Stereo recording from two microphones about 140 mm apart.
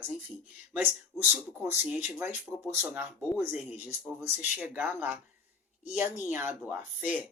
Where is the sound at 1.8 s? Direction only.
10° right (ahead or behind).